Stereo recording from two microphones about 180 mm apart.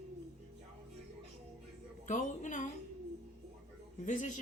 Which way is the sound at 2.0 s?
45° left (ahead or behind).